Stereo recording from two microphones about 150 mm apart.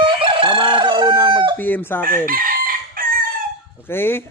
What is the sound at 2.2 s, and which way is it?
Chicken, 70° right (ahead or behind).